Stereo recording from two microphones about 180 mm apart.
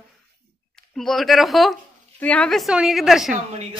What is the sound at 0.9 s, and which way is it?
A woman's voice, centre (ahead or behind).